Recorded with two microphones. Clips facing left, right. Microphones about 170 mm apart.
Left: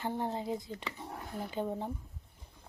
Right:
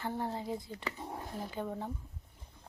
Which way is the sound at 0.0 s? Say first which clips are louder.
Left 2 dB; 20° left (ahead or behind).